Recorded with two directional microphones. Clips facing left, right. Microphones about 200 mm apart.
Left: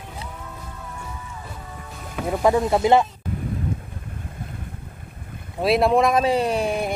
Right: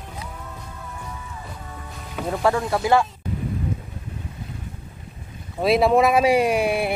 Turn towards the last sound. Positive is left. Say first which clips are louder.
# right 2 dB
turn(degrees=-10)  # may be behind; listen again after turning